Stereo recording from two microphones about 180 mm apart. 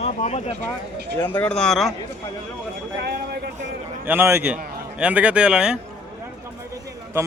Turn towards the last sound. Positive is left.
turn(degrees=-20)  # may be behind; listen again after turning